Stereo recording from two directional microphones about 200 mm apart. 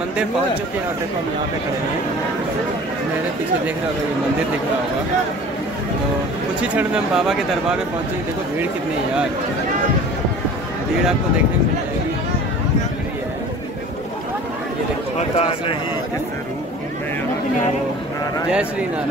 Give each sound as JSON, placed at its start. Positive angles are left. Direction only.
{"t": 6.7, "sound": "speech", "side_deg": -5}
{"t": 15.1, "sound": "speech", "side_deg": 30}
{"t": 18.5, "sound": "speech", "side_deg": -5}